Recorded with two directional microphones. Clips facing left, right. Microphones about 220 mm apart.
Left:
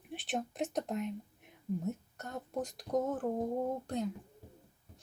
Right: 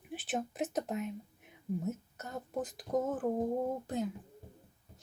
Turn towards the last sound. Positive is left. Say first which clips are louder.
# even
turn(degrees=-5)  # may be behind; listen again after turning